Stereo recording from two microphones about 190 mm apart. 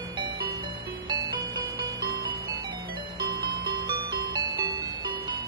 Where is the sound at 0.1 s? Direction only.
25° right (ahead or behind).